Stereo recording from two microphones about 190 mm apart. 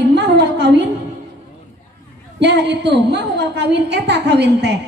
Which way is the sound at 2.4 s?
65° right (ahead or behind).